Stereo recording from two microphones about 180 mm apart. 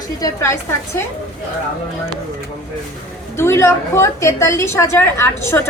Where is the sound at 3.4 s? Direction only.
15° left (ahead or behind).